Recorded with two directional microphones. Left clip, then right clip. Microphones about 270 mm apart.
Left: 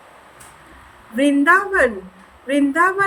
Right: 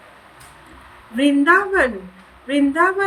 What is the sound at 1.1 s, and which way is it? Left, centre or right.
A woman's voice, centre.